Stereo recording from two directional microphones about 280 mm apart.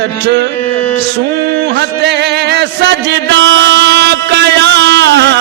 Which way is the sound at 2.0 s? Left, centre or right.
Right.